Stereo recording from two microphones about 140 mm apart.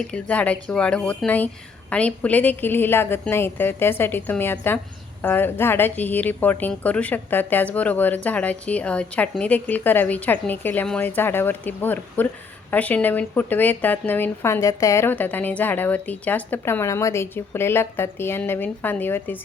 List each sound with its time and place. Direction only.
0.1 s speech: 10° left (ahead or behind)